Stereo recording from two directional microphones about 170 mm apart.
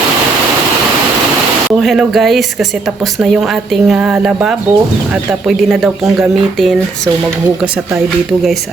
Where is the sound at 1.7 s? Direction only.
Centre (ahead or behind).